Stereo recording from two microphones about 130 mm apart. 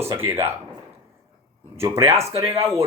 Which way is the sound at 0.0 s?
20° right (ahead or behind).